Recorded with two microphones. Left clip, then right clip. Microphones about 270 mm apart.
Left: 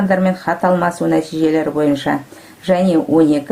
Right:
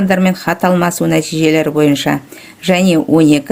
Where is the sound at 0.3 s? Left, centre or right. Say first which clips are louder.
Right 1 dB; right.